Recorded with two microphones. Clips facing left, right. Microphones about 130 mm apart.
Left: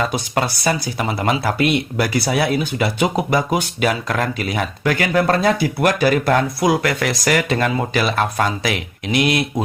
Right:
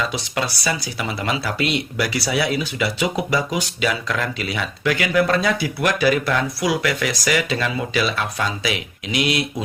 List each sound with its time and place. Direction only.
0.0 s speech: 50° left (ahead or behind)